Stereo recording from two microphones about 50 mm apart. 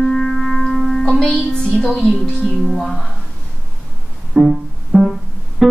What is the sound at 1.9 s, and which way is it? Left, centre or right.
Speech, left.